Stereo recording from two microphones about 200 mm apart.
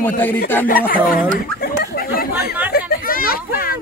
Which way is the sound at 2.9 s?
45° left (ahead or behind).